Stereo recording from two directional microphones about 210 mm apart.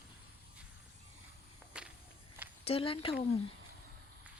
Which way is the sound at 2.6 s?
25° left (ahead or behind).